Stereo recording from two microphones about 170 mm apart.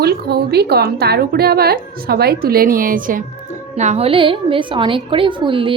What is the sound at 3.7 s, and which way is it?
A woman's voice, 40° right (ahead or behind).